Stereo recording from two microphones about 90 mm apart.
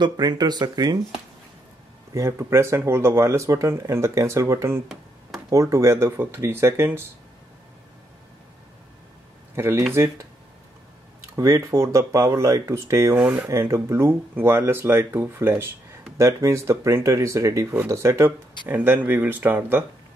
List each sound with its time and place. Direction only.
0.0 s speech: 50° right (ahead or behind)
2.1 s speech: 30° right (ahead or behind)
9.6 s speech: 30° right (ahead or behind)
11.3 s speech: 35° right (ahead or behind)